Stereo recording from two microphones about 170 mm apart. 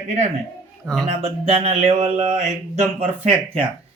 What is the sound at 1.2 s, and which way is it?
A man's voice, 35° right (ahead or behind).